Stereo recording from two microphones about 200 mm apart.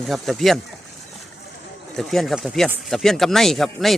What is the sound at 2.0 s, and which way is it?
Speech, centre (ahead or behind).